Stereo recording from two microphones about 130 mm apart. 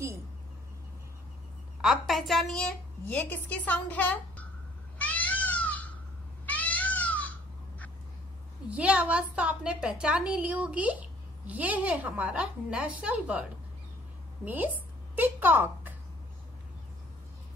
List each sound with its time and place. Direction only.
1.8 s a woman's voice: centre (ahead or behind)
4.9 s cat: 10° left (ahead or behind)
8.6 s a woman's voice: 10° right (ahead or behind)